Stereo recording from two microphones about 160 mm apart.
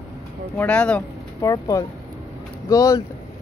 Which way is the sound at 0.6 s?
10° left (ahead or behind).